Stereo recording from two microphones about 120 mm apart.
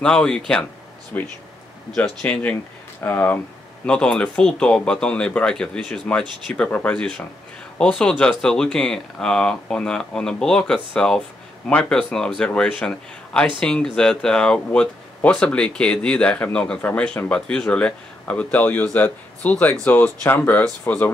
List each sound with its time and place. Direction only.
0.0 s speech: 5° left (ahead or behind)